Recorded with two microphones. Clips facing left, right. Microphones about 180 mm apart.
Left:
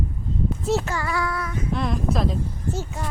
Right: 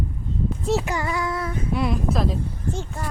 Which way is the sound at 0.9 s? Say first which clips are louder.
Right 1 dB; 20° right (ahead or behind).